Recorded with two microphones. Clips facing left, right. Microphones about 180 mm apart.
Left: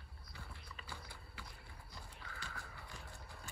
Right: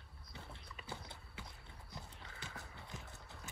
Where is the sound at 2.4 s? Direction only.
20° right (ahead or behind).